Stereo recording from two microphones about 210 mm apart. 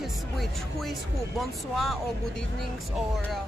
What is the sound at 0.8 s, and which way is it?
Speech, centre (ahead or behind).